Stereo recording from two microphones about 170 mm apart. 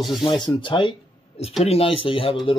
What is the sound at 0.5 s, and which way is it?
Speech, 25° left (ahead or behind).